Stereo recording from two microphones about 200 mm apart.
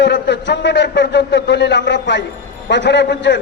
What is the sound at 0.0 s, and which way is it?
A man's voice, 60° left (ahead or behind).